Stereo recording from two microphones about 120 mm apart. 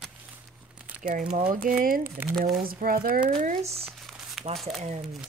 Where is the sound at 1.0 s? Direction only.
90° right.